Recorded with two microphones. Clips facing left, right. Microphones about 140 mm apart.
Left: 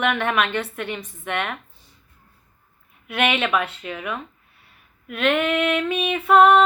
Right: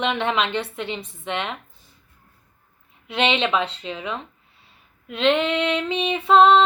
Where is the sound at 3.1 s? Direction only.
25° right (ahead or behind).